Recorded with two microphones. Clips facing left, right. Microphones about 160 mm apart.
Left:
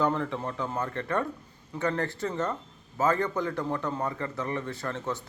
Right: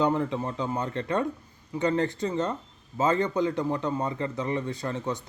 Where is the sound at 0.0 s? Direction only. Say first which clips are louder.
Right 2 dB; 15° right (ahead or behind).